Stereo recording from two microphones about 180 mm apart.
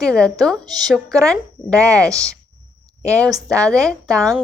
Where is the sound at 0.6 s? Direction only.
20° right (ahead or behind).